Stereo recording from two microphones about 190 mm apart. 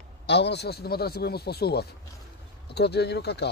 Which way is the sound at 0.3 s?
65° left (ahead or behind).